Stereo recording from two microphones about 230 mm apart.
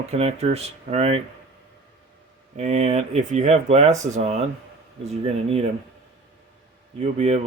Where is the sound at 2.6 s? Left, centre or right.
Right.